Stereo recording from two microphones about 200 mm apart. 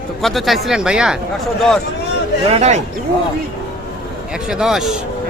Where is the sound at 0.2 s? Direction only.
Centre (ahead or behind).